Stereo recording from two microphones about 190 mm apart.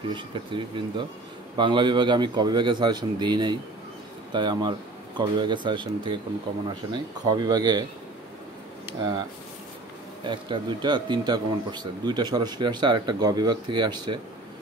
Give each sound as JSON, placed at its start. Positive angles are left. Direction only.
{"t": 0.1, "sound": "speech", "side_deg": -25}
{"t": 10.2, "sound": "speech", "side_deg": -25}